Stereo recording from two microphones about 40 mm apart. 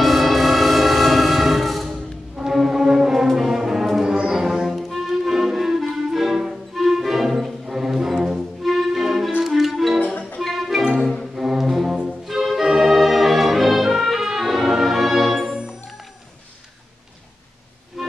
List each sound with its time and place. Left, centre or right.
0.0 s music: centre
10.8 s music: centre
18.0 s music: centre